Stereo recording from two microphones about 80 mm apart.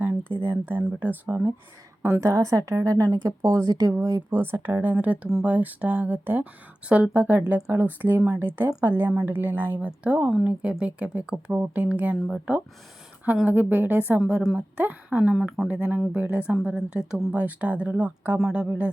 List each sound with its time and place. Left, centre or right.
0.0 s a sound: right
0.4 s a woman's voice: right
4.3 s speech: right
15.3 s speech: centre
15.6 s speech: right
18.3 s speech: centre